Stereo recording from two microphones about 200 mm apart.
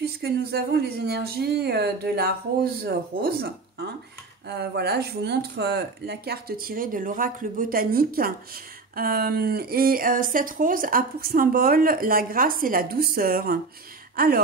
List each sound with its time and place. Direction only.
0.0 s speech: 50° right (ahead or behind)
4.5 s speech: 55° right (ahead or behind)